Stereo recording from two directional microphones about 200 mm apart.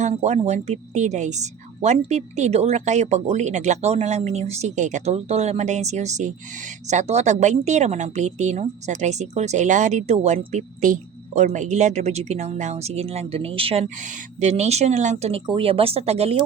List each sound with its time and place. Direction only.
0.0 s speech: 35° right (ahead or behind)